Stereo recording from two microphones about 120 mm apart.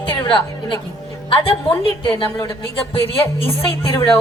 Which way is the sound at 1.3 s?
45° left (ahead or behind).